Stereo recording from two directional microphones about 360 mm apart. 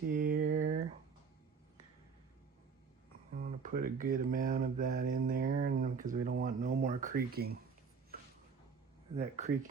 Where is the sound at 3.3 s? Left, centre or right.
Right.